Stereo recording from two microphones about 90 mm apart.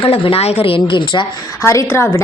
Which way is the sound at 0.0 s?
90° left.